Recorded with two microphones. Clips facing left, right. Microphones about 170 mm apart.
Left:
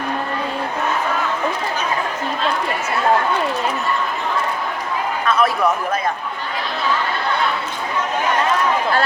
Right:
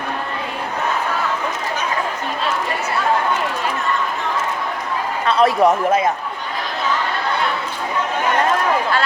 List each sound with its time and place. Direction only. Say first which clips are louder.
5.2 s a man's voice: right 4 dB; 30° right (ahead or behind)